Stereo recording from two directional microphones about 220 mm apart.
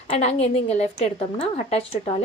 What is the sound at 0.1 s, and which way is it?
A woman's voice, 30° left (ahead or behind).